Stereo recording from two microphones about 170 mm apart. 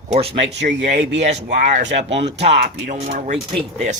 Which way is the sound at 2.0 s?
90° right.